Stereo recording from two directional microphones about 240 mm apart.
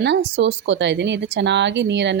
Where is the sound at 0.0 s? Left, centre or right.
Right.